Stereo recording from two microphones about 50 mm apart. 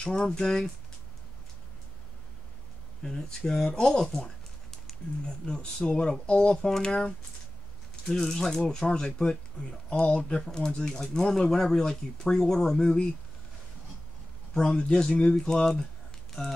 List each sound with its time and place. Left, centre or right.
0.0 s speech: centre
3.0 s speech: centre
5.2 s speech: left
7.9 s speech: centre
10.9 s speech: centre
14.5 s speech: centre
16.3 s a sound: centre